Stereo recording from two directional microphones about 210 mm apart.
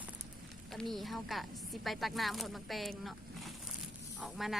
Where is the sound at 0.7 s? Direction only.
Centre (ahead or behind).